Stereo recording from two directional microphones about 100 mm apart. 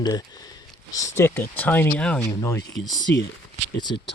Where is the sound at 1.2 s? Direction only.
20° left (ahead or behind).